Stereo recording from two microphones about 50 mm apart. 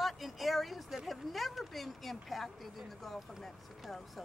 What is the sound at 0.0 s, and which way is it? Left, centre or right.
Speech, centre.